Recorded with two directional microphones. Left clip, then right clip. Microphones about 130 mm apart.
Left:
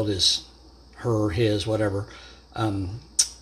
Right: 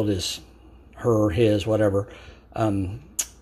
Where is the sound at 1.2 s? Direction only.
25° right (ahead or behind).